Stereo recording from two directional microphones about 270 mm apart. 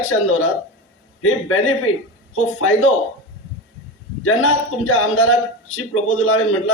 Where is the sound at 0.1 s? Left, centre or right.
Left.